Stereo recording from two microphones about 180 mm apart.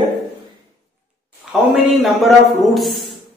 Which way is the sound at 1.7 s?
Centre (ahead or behind).